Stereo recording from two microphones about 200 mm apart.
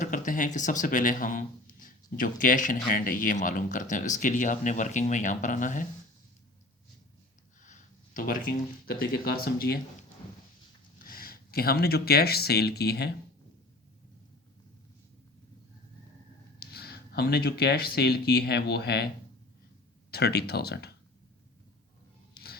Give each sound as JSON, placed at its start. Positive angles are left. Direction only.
{"t": 0.0, "sound": "speech", "side_deg": 40}
{"t": 7.6, "sound": "speech", "side_deg": 40}
{"t": 11.0, "sound": "speech", "side_deg": 45}
{"t": 16.6, "sound": "speech", "side_deg": 50}
{"t": 22.4, "sound": "a sound", "side_deg": 55}